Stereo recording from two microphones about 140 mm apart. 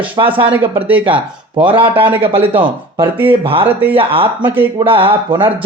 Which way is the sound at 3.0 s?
15° right (ahead or behind).